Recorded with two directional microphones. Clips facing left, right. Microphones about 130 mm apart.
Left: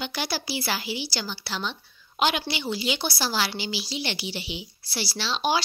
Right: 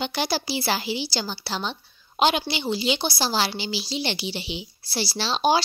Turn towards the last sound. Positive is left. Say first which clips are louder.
# right 4 dB
turn(degrees=-35)  # may be behind; listen again after turning